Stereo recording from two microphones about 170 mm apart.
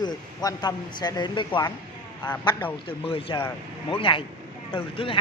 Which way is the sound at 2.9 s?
30° left (ahead or behind).